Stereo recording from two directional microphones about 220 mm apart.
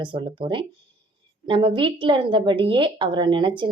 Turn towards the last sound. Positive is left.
turn(degrees=-20)  # may be behind; listen again after turning